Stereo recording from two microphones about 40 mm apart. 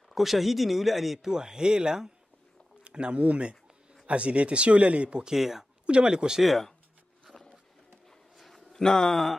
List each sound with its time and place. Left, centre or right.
0.1 s speech: centre
1.2 s speech: centre; by 5.2 s right
5.2 s speech: centre
5.9 s speech: right
6.4 s speech: centre
7.3 s wild animals: left
8.4 s a sound: centre
8.8 s speech: centre